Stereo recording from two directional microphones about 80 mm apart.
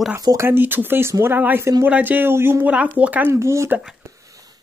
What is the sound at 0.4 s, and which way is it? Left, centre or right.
Speech, right.